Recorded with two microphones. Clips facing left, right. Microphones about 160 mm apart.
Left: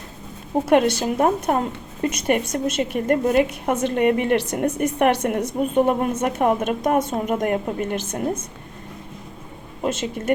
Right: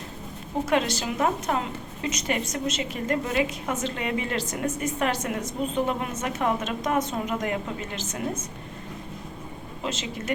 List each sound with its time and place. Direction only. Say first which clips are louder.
0.7 s a woman's voice: left 8 dB; 55° left (ahead or behind)
9.8 s a woman's voice: left 8 dB; 55° left (ahead or behind)